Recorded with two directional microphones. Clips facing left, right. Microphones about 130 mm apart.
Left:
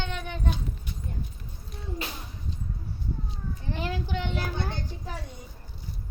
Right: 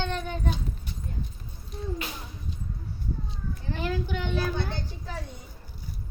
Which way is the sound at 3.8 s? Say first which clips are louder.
Right 2 dB; 25° left (ahead or behind).